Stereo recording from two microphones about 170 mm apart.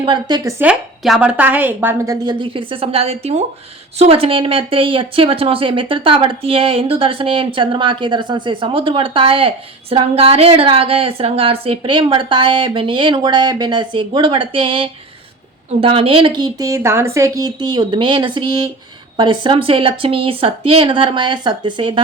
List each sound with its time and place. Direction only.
0.0 s a woman's voice: 25° right (ahead or behind)
0.6 s a woman's voice: 5° right (ahead or behind)
2.2 s a woman's voice: 30° right (ahead or behind)